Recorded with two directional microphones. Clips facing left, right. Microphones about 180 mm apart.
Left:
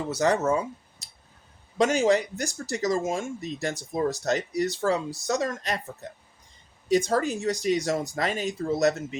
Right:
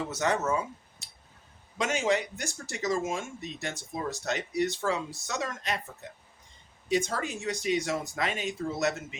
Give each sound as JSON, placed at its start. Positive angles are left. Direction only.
{"t": 0.1, "sound": "speech", "side_deg": 35}
{"t": 1.0, "sound": "a sound", "side_deg": 35}
{"t": 1.8, "sound": "speech", "side_deg": 35}